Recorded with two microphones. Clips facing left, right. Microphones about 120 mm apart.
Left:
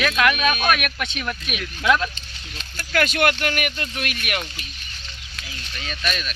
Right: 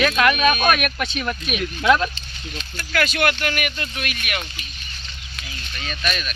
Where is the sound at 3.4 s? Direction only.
35° left (ahead or behind).